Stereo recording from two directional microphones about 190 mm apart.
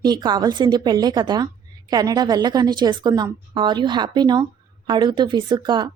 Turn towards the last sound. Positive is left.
turn(degrees=-25)  # may be behind; listen again after turning